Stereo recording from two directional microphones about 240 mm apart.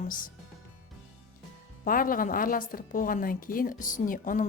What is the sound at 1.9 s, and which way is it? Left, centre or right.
A woman's voice, left.